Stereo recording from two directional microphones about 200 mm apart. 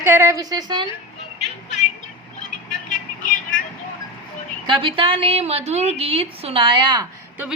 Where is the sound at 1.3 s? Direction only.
35° left (ahead or behind).